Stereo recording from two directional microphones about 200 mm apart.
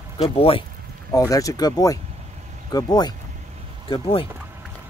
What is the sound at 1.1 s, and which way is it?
Speech, 15° left (ahead or behind).